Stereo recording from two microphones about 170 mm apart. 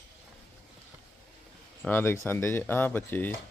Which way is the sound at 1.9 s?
15° left (ahead or behind).